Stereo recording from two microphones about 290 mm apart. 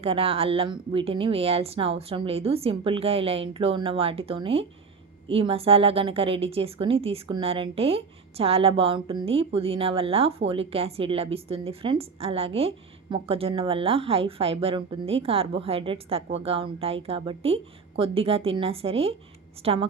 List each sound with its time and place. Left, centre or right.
0.0 s a woman's voice: centre